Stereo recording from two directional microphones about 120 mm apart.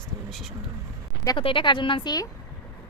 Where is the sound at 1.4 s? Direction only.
45° left (ahead or behind).